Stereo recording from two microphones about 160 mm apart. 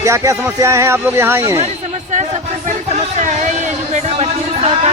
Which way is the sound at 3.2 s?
50° right (ahead or behind).